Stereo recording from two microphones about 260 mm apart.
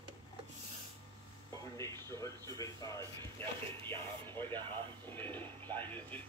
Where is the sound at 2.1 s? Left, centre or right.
Centre.